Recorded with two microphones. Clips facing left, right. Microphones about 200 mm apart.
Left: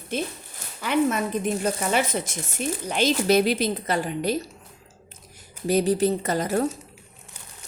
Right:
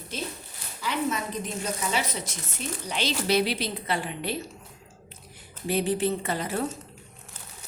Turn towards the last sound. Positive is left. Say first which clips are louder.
# left 5 dB
turn(degrees=40)  # may be behind; listen again after turning